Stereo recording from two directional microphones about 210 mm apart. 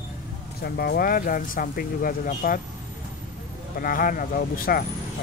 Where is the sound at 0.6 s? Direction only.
50° left (ahead or behind).